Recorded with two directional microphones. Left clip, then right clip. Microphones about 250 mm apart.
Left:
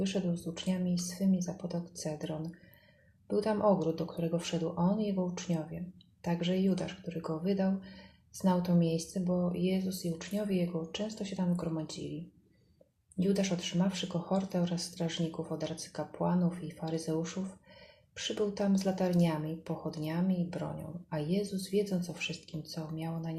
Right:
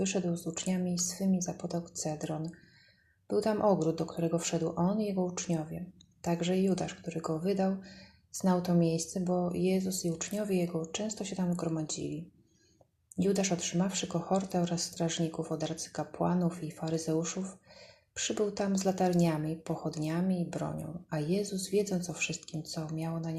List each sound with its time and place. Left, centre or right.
0.0 s speech: centre
13.1 s speech: centre